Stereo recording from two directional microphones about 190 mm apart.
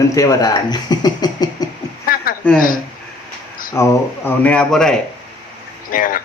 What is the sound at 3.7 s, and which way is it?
Speech, 15° left (ahead or behind).